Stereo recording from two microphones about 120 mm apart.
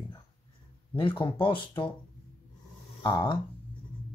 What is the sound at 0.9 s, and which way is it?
Speech, 45° left (ahead or behind).